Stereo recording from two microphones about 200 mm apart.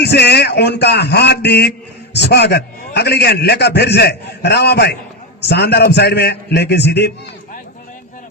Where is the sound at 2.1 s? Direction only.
55° left (ahead or behind).